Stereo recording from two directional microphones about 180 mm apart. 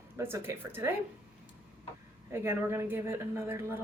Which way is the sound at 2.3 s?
15° right (ahead or behind).